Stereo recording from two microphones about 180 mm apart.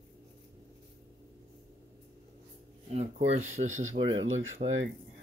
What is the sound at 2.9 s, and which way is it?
Speech, 35° right (ahead or behind).